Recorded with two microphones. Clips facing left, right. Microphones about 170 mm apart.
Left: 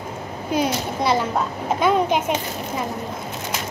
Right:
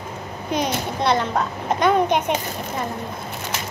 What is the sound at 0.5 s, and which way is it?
A child's voice, 5° left (ahead or behind).